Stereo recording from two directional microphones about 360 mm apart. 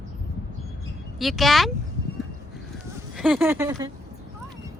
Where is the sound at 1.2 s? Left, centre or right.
Centre.